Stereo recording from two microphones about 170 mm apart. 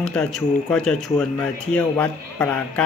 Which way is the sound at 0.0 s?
5° left (ahead or behind).